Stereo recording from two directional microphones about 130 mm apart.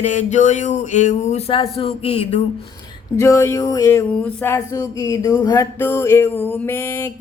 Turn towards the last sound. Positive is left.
turn(degrees=20)  # may be behind; listen again after turning